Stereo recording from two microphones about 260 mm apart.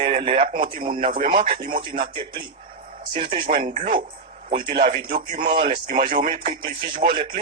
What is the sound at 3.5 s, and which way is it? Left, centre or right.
Speech, right.